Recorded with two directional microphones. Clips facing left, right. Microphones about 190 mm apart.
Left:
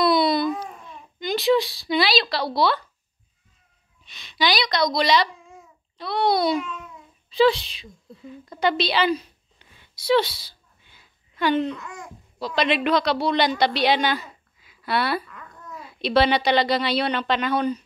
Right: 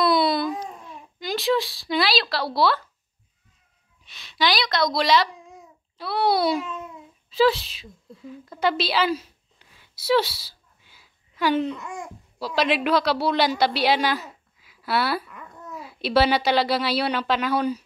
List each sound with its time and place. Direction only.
0.0 s babbling: centre (ahead or behind)
0.8 s speech: centre (ahead or behind)
4.0 s a woman's voice: centre (ahead or behind)
5.3 s babbling: 15° right (ahead or behind)
5.9 s a child's voice: 5° right (ahead or behind)
15.3 s babbling: 15° right (ahead or behind)
15.7 s a woman's voice: 5° right (ahead or behind)